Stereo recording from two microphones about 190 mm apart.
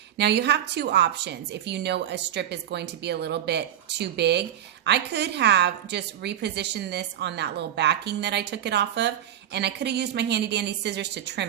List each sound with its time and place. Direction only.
0.2 s a woman's voice: 65° right (ahead or behind)